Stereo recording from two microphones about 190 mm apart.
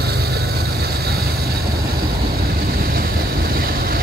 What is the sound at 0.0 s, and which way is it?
Vehicle, 55° right (ahead or behind).